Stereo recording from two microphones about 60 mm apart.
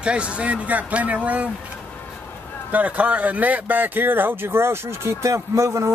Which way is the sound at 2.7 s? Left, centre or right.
Right.